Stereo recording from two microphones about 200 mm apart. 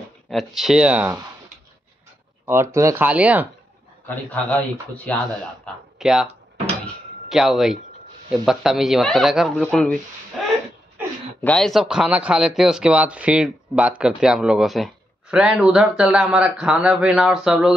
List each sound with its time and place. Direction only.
0.3 s speech: centre (ahead or behind)
2.4 s speech: 10° right (ahead or behind)
4.1 s a man's voice: 10° left (ahead or behind)
7.2 s speech: centre (ahead or behind)
10.4 s a sound: centre (ahead or behind)
11.4 s speech: centre (ahead or behind)